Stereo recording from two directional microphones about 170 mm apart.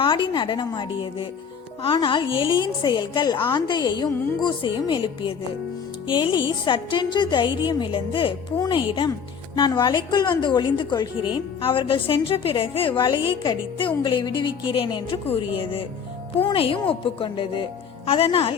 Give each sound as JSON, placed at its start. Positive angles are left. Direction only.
{"t": 0.0, "sound": "a woman's voice", "side_deg": 30}